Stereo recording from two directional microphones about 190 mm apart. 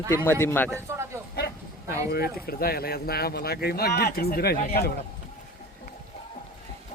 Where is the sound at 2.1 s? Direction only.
50° left (ahead or behind).